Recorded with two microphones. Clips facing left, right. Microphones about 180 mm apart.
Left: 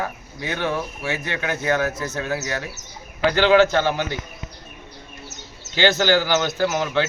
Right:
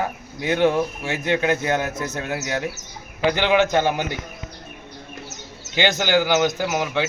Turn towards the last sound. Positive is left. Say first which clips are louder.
# left 2 dB
turn(degrees=-15)  # may be behind; listen again after turning